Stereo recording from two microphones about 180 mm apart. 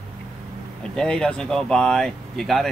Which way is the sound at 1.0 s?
5° left (ahead or behind).